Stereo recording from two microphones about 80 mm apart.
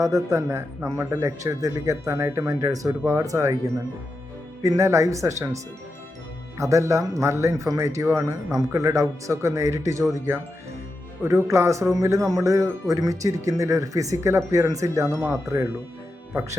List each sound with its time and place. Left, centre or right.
0.0 s speech: right
4.6 s speech: right
6.6 s speech: right